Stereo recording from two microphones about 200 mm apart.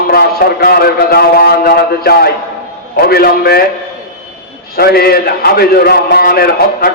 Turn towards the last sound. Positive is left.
turn(degrees=50)  # may be behind; listen again after turning